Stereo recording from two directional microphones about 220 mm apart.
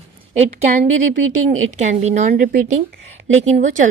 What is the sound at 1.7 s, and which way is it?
Speech, 30° right (ahead or behind).